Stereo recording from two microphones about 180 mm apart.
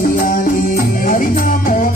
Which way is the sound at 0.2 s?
50° left (ahead or behind).